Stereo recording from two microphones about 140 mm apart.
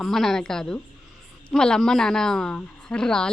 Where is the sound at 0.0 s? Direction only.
Centre (ahead or behind).